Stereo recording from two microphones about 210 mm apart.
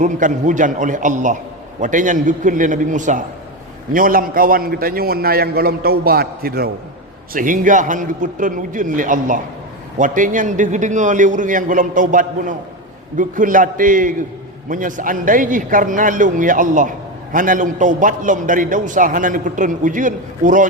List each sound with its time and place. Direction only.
0.0 s a man's voice: 35° right (ahead or behind)